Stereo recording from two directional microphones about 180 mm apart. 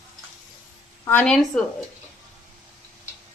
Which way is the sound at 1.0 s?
10° left (ahead or behind).